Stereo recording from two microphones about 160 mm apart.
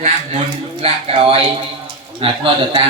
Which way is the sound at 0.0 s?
40° right (ahead or behind).